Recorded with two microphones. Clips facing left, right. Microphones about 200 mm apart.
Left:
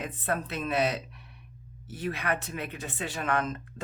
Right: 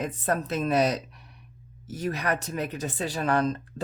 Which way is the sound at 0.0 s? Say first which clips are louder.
Right 4 dB; 40° right (ahead or behind).